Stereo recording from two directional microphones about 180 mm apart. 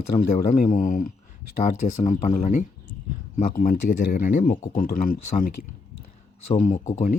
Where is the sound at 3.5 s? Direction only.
55° left (ahead or behind).